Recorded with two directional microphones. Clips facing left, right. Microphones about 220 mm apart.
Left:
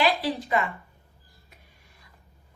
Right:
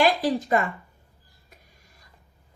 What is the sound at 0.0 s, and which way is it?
Speech, 45° right (ahead or behind).